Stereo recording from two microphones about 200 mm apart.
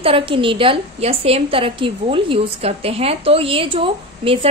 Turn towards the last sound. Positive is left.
turn(degrees=-25)  # may be behind; listen again after turning